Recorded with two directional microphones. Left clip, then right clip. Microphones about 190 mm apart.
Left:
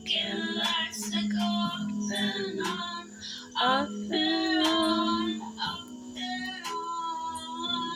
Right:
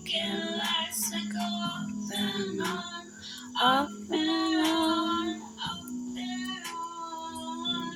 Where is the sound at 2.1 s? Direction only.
20° right (ahead or behind).